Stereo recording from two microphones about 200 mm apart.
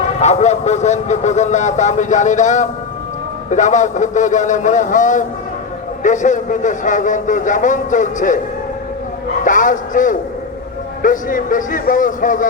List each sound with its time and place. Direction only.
0.2 s speech: 35° left (ahead or behind)
9.4 s speech: 40° left (ahead or behind)